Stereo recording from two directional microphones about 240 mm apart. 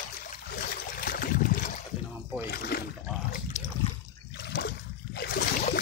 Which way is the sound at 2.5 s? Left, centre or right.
Left.